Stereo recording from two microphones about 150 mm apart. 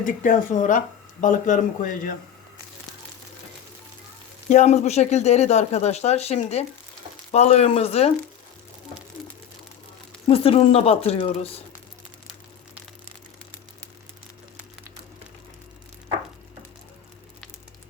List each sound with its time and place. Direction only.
0.0 s speech: 60° left (ahead or behind)
4.4 s speech: 50° left (ahead or behind)
10.2 s speech: 40° left (ahead or behind)